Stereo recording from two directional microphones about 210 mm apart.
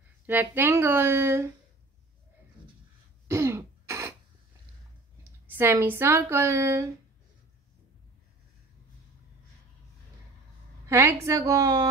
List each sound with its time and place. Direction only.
0.3 s a woman's voice: 10° right (ahead or behind)
3.3 s throat clearing: 10° right (ahead or behind)
5.5 s a woman's voice: 10° right (ahead or behind)
10.9 s a woman's voice: 10° right (ahead or behind)